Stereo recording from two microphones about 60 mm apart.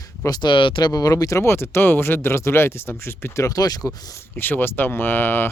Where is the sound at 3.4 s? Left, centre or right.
Left.